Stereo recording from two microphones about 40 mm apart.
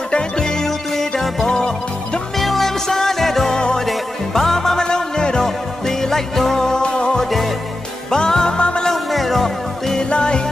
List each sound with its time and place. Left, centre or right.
0.1 s music: centre
3.5 s music: centre
3.8 s music: centre
8.8 s music: centre
10.0 s music: left